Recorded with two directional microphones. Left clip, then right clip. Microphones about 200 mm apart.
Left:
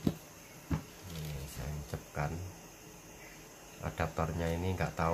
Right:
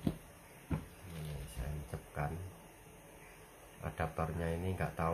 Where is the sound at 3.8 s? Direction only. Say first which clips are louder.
Left 3 dB; centre (ahead or behind).